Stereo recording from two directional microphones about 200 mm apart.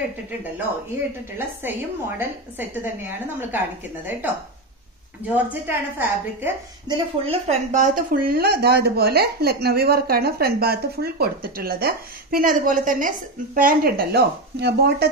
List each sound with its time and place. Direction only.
1.6 s a woman's voice: 10° right (ahead or behind)
5.5 s a woman's voice: 10° right (ahead or behind)
6.9 s speech: 30° right (ahead or behind); by 15.0 s 55° right (ahead or behind)